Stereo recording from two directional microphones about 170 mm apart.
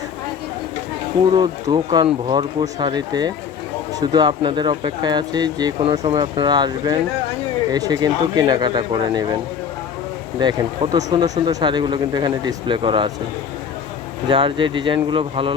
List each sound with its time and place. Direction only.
1.3 s speech: 25° right (ahead or behind)
10.4 s speech: 25° right (ahead or behind)
14.3 s speech: 30° right (ahead or behind)